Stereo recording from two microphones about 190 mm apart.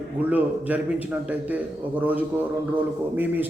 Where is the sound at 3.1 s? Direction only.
10° right (ahead or behind).